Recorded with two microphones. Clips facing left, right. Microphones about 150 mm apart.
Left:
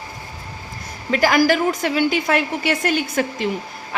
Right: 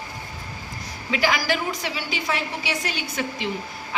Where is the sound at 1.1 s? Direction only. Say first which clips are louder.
Left 7 dB; 45° left (ahead or behind).